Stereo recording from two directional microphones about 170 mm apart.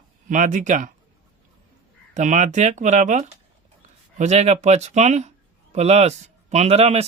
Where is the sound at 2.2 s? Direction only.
45° right (ahead or behind).